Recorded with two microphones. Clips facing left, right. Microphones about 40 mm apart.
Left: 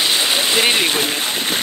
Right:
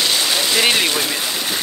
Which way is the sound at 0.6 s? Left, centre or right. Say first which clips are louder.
Even; centre.